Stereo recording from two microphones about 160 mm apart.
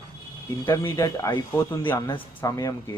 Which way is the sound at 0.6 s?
15° left (ahead or behind).